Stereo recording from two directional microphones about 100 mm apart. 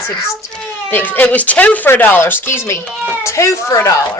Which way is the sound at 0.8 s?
20° left (ahead or behind).